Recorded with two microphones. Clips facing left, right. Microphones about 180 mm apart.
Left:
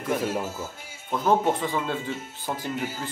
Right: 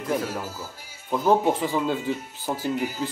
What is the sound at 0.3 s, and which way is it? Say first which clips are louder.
Speech: left 3 dB; 25° left (ahead or behind).